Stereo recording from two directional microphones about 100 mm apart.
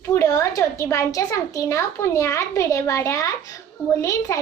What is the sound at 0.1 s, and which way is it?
Child singing, 30° left (ahead or behind).